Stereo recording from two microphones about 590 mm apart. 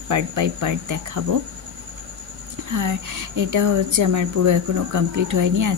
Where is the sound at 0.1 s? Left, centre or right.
Right.